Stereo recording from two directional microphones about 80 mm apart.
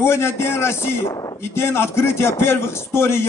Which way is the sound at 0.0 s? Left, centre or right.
Left.